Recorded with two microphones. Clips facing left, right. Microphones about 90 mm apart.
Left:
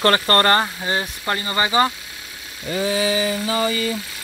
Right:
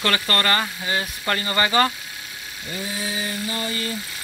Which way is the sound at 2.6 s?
90° left.